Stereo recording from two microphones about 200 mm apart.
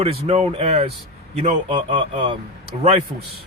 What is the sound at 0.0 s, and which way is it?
Speech, 30° right (ahead or behind).